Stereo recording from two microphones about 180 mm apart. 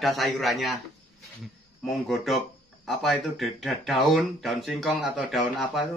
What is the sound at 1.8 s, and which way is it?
Speech, centre (ahead or behind).